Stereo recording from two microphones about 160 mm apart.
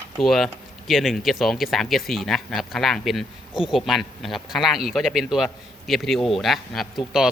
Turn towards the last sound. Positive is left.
turn(degrees=0)  # may be behind; listen again after turning